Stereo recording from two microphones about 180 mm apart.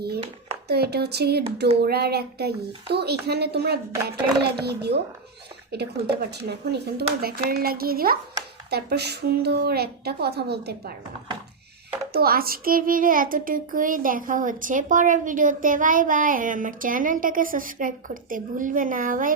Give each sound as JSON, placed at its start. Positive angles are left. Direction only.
{"t": 0.7, "sound": "a woman's voice", "side_deg": -65}
{"t": 12.1, "sound": "a child's voice", "side_deg": -55}